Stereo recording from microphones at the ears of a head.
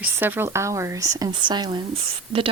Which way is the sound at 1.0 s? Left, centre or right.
Right.